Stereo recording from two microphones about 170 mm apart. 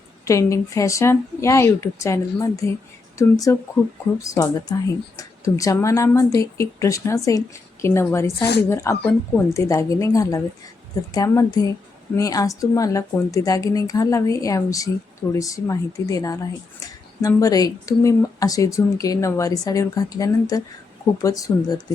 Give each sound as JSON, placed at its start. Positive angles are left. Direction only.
{"t": 0.3, "sound": "a woman's voice", "side_deg": 20}